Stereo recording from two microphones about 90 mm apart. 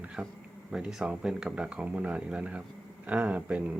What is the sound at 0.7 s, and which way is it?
Speech, 10° right (ahead or behind).